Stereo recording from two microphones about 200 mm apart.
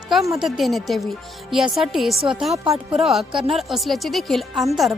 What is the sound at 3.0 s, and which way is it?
Speech, centre (ahead or behind).